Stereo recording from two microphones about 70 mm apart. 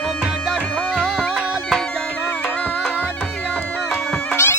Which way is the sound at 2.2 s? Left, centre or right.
Centre.